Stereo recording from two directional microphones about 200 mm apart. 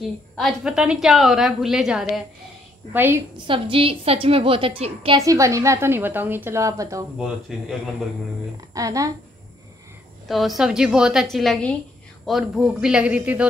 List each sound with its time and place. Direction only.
0.4 s a woman's voice: centre (ahead or behind)
3.4 s a woman's voice: 25° right (ahead or behind)
5.2 s a woman's voice: 15° right (ahead or behind)
7.2 s a woman's voice: centre (ahead or behind)
8.7 s a woman's voice: 15° right (ahead or behind)
10.2 s a woman's voice: centre (ahead or behind)